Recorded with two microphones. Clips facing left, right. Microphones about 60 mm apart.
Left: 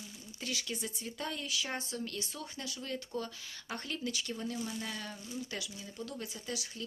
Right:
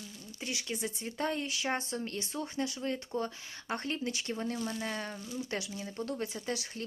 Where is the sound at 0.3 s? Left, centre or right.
Right.